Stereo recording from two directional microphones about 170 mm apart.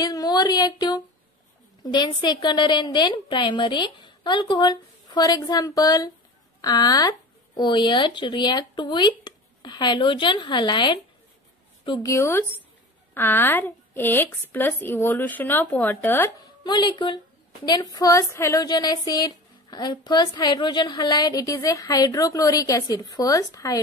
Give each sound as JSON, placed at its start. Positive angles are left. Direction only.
{"t": 0.0, "sound": "a sound", "side_deg": 20}
{"t": 1.8, "sound": "a woman's voice", "side_deg": 25}
{"t": 16.6, "sound": "speech", "side_deg": 25}